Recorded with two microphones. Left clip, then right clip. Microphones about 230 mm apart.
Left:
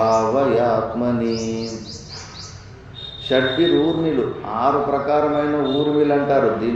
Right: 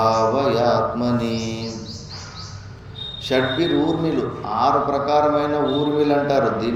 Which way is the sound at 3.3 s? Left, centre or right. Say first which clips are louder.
Left 2 dB; right.